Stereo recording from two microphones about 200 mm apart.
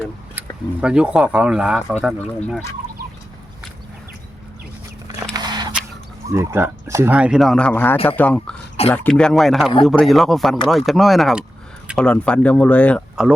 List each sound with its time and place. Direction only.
0.8 s speech: 5° right (ahead or behind)
5.3 s a sound: 20° right (ahead or behind)
6.2 s speech: 15° right (ahead or behind); by 13.2 s 5° left (ahead or behind)